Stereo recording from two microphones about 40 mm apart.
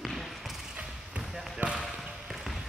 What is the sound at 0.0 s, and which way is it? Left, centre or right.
Basketball bounce, centre.